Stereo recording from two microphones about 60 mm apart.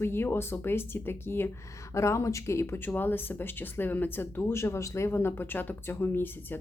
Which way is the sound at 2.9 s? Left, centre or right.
Left.